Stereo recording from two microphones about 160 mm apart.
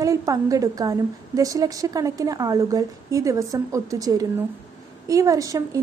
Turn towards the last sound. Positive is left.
turn(degrees=-20)  # may be behind; listen again after turning